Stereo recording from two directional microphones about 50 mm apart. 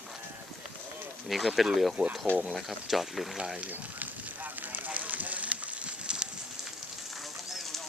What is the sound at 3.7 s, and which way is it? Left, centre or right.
Fire, right.